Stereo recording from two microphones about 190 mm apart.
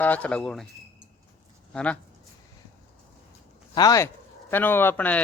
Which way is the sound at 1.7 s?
5° left (ahead or behind).